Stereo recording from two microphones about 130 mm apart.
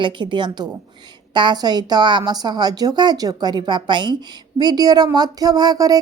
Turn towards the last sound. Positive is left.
turn(degrees=-30)  # may be behind; listen again after turning